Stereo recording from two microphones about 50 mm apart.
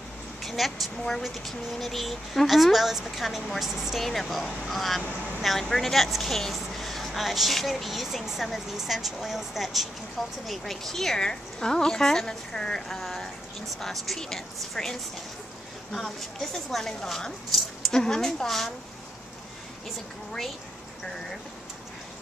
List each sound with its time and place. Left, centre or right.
0.4 s a woman's voice: centre